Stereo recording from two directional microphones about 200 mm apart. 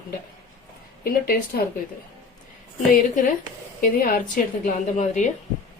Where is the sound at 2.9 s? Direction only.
45° left (ahead or behind).